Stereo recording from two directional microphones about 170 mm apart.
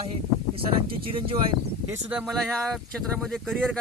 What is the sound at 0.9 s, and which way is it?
Speech, 30° right (ahead or behind).